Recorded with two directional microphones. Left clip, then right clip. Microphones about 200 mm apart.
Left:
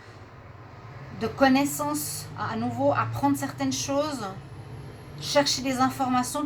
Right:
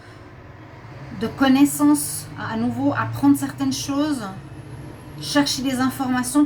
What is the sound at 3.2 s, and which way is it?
A woman's voice, 40° left (ahead or behind).